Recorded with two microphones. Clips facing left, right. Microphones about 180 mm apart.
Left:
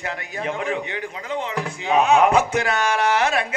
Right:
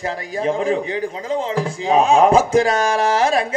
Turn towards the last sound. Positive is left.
turn(degrees=-30)  # may be behind; listen again after turning